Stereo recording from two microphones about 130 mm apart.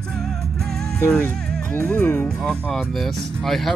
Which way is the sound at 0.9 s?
20° left (ahead or behind).